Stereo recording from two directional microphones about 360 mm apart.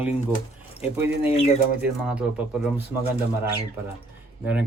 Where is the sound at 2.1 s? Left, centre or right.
Centre.